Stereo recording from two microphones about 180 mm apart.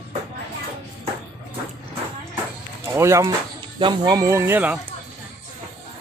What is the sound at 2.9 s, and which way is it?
Speech, 15° right (ahead or behind).